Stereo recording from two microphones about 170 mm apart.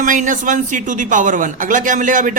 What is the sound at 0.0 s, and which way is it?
Speech, 50° right (ahead or behind).